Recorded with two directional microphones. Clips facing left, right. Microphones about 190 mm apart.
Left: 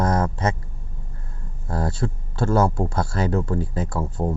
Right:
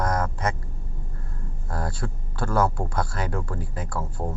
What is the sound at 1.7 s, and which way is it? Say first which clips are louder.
Speech: left 6 dB; 25° left (ahead or behind).